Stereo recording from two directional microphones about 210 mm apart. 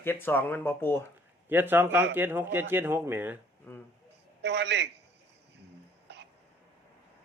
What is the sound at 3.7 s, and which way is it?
Speech, 10° left (ahead or behind).